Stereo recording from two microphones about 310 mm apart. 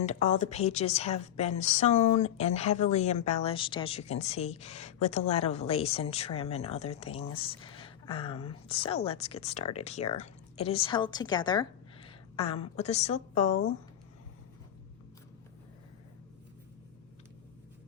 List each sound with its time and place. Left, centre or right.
0.0 s a woman's voice: left